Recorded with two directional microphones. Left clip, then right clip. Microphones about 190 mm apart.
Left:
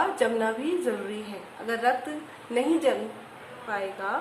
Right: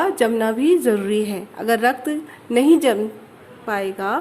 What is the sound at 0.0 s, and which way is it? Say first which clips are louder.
A woman's voice: right 6 dB; 50° right (ahead or behind).